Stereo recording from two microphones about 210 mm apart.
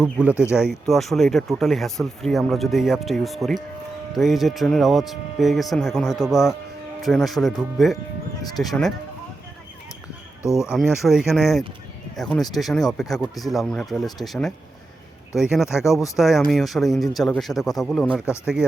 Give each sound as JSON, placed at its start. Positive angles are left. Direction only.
{"t": 0.0, "sound": "speech", "side_deg": -5}
{"t": 8.4, "sound": "speech", "side_deg": 20}
{"t": 8.6, "sound": "speech", "side_deg": 0}
{"t": 10.5, "sound": "speech", "side_deg": 0}